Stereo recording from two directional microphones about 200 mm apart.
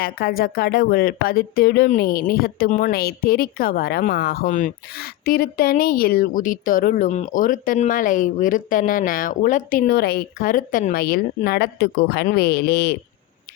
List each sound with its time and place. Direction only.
0.0 s speech: 50° left (ahead or behind)